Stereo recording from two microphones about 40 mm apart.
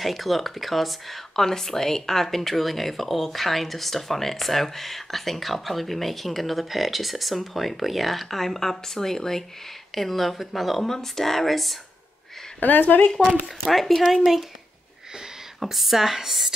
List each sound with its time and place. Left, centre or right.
0.0 s speech: centre
12.5 s speech: left
13.7 s speech: centre
15.6 s speech: centre